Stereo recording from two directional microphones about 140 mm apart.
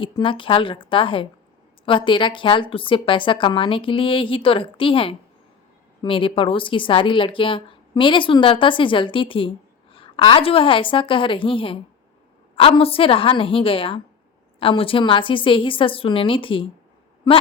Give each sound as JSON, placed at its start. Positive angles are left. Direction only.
{"t": 0.0, "sound": "a woman's voice", "side_deg": 35}